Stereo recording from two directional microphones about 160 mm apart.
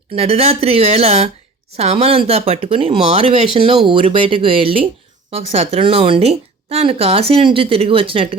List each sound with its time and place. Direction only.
0.2 s a woman's voice: 40° right (ahead or behind)